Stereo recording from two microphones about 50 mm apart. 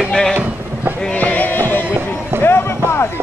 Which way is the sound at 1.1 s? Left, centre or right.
Left.